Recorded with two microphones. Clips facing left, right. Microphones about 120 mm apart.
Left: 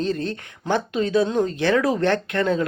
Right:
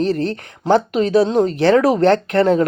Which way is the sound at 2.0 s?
35° right (ahead or behind).